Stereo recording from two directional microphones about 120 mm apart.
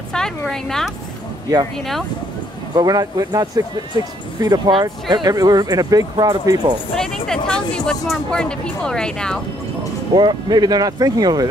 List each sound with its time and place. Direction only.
0.1 s a woman's voice: 5° left (ahead or behind)
2.7 s speech: 35° right (ahead or behind)
7.2 s speech: 5° left (ahead or behind)
10.1 s speech: 35° right (ahead or behind)